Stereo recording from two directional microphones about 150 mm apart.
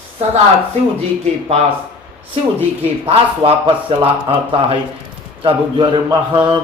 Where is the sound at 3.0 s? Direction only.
40° right (ahead or behind).